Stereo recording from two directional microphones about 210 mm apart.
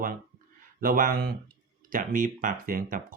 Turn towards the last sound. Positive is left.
turn(degrees=-40)  # may be behind; listen again after turning